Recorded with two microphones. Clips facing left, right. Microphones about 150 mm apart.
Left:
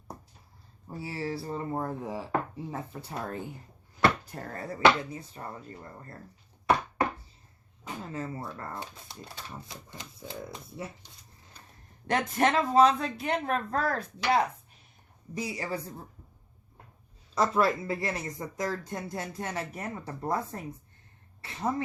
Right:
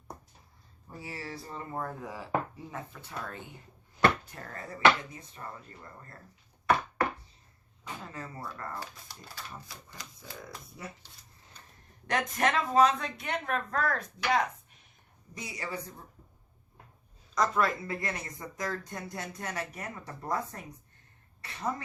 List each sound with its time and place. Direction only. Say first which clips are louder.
0.9 s speech: left 7 dB; 30° left (ahead or behind)
8.1 s speech: left 5 dB; 25° left (ahead or behind)
12.0 s speech: left 3 dB; 30° left (ahead or behind)
17.3 s speech: left 3 dB; 30° left (ahead or behind)